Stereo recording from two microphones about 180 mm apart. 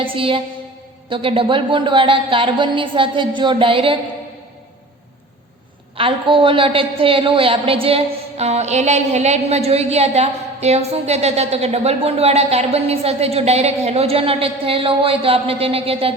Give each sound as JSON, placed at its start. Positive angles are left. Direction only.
{"t": 0.0, "sound": "music", "side_deg": -30}
{"t": 1.1, "sound": "a woman's voice", "side_deg": -30}
{"t": 6.0, "sound": "a woman's voice", "side_deg": -30}